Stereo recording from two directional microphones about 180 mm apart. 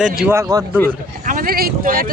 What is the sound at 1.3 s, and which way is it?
Speech, 50° right (ahead or behind).